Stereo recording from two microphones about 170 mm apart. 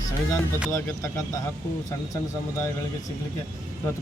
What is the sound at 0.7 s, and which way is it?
Speech, 20° left (ahead or behind).